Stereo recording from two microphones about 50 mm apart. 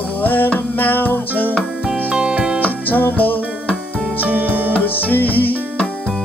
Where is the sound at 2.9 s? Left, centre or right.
Left.